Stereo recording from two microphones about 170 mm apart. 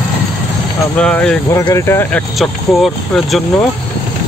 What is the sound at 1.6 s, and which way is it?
Speech, 20° left (ahead or behind).